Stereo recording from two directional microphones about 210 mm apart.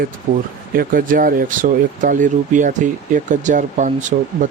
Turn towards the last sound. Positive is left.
turn(degrees=-35)  # may be behind; listen again after turning